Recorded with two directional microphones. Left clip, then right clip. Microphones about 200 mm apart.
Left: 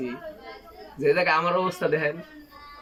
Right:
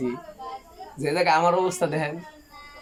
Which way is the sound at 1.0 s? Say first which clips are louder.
Right 1 dB; 20° right (ahead or behind).